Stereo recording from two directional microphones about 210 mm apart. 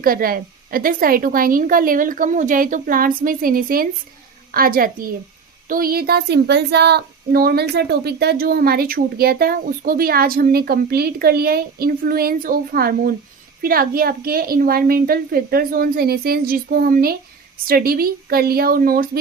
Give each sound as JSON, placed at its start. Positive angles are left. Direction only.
{"t": 0.0, "sound": "a woman's voice", "side_deg": -45}